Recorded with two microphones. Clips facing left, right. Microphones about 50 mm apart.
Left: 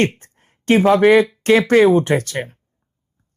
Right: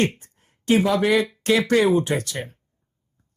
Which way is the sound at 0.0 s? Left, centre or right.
Left.